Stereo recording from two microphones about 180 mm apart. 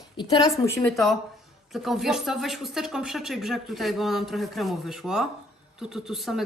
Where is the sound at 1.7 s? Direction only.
Centre (ahead or behind).